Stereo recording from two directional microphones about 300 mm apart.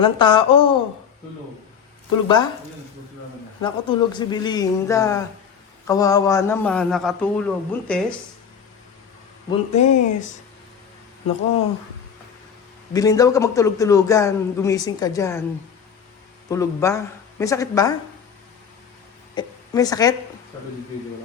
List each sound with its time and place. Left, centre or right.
0.0 s a man's voice: centre
2.2 s a man's voice: centre
3.6 s a man's voice: centre
9.5 s speech: left
12.9 s a man's voice: centre
16.5 s a man's voice: centre
19.3 s a woman's voice: centre